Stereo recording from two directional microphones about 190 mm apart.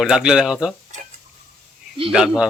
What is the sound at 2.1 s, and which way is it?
Speech, 5° right (ahead or behind).